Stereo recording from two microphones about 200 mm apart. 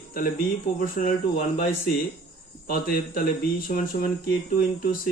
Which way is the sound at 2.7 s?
45° left (ahead or behind).